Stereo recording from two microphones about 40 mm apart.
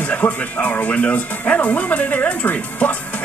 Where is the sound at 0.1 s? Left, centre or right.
Left.